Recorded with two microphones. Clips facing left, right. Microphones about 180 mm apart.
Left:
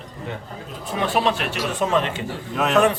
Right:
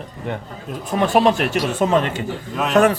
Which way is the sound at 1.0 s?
45° right (ahead or behind).